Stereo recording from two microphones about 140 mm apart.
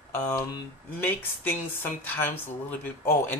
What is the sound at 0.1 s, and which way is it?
Speech, 15° left (ahead or behind).